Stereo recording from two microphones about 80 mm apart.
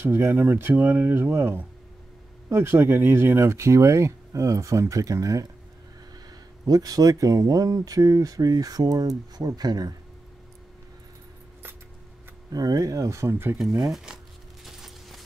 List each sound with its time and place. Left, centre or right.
0.0 s speech: right
6.6 s speech: right
12.5 s speech: right
13.6 s speech: centre
13.9 s zipper: centre